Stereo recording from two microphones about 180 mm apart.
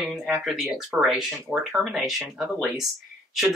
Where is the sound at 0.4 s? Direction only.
Centre (ahead or behind).